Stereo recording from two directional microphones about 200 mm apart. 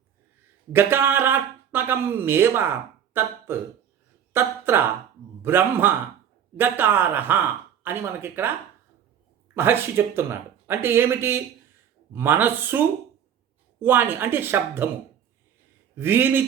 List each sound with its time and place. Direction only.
0.7 s speech: 10° right (ahead or behind)
9.6 s speech: 10° right (ahead or behind)
16.0 s speech: 10° right (ahead or behind)